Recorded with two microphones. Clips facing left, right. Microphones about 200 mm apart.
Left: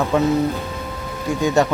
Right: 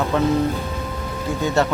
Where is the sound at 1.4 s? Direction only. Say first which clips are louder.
Left 3 dB; 15° left (ahead or behind).